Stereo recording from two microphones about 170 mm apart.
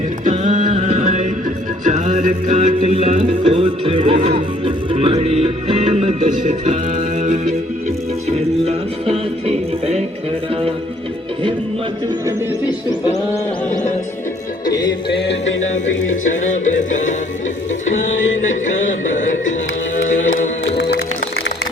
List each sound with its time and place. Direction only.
0.3 s music: 45° right (ahead or behind)
8.6 s music: 35° right (ahead or behind)
12.6 s music: 20° left (ahead or behind)
14.7 s music: 25° left (ahead or behind)
15.2 s music: 90° left
16.2 s music: 45° left (ahead or behind)
20.7 s music: 75° left (ahead or behind)